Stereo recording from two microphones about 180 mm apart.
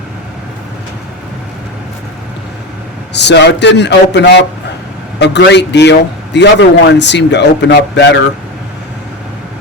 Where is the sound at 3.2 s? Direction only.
75° left (ahead or behind).